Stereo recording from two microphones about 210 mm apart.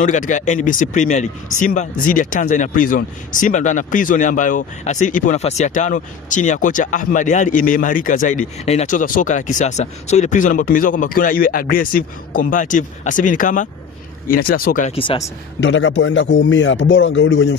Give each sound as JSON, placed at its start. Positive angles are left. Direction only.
{"t": 0.0, "sound": "speech", "side_deg": 35}
{"t": 15.0, "sound": "speech", "side_deg": 25}
{"t": 15.6, "sound": "a man's voice", "side_deg": 65}